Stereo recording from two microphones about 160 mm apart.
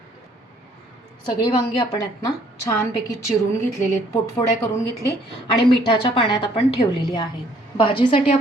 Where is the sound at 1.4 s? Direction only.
25° left (ahead or behind).